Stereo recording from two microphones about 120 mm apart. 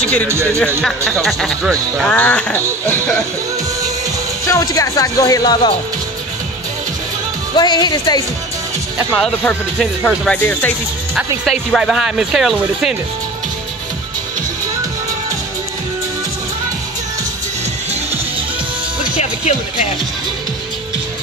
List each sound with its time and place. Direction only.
0.0 s speech: 10° left (ahead or behind)
0.3 s speech: 25° right (ahead or behind)
0.7 s speech: 5° left (ahead or behind)
2.0 s speech: 10° left (ahead or behind)
4.5 s speech: 25° left (ahead or behind)
7.5 s speech: 35° left (ahead or behind)
9.1 s speech: 5° left (ahead or behind)
11.7 s speech: 5° right (ahead or behind)